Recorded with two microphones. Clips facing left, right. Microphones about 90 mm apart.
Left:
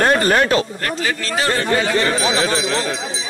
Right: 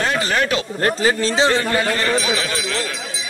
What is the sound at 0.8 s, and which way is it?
Speech, 30° right (ahead or behind).